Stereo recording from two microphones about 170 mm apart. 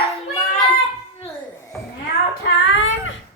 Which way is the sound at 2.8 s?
90° left.